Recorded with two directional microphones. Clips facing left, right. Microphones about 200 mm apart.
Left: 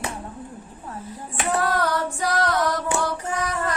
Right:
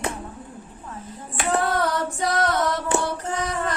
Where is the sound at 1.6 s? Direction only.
25° right (ahead or behind).